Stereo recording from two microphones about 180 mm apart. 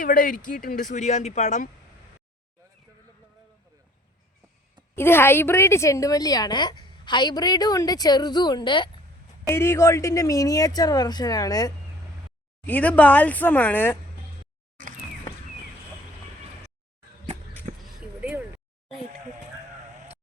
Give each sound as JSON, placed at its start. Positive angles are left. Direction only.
{"t": 0.0, "sound": "speech", "side_deg": 50}
{"t": 4.9, "sound": "a woman's voice", "side_deg": 15}
{"t": 9.5, "sound": "a woman's voice", "side_deg": 15}
{"t": 12.6, "sound": "speech", "side_deg": 10}
{"t": 18.2, "sound": "a sound", "side_deg": -10}